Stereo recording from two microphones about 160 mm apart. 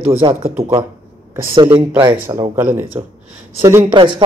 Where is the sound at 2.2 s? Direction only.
15° right (ahead or behind).